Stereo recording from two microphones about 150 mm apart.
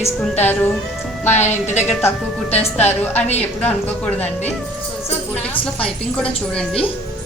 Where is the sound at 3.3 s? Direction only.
45° left (ahead or behind).